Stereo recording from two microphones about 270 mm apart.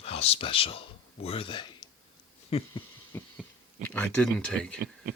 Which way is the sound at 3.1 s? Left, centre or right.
Centre.